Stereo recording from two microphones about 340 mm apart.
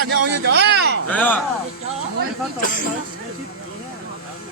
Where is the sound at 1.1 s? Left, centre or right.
Centre.